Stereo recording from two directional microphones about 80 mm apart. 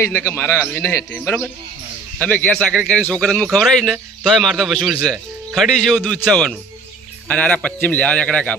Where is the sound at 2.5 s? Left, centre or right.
Centre.